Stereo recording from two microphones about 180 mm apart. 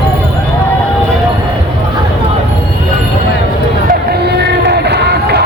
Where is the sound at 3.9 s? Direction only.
65° right (ahead or behind).